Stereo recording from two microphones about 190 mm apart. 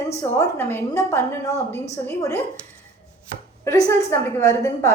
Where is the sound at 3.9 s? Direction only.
15° left (ahead or behind).